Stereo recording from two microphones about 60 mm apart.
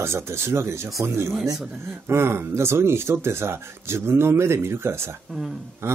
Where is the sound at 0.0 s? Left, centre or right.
Right.